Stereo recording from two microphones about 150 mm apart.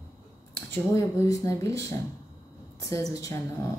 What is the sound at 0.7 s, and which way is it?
A woman's voice, 20° left (ahead or behind).